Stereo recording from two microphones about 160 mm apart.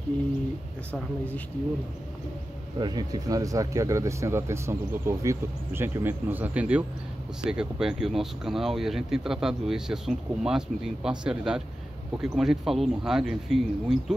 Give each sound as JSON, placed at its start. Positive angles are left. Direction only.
{"t": 2.8, "sound": "speech", "side_deg": -25}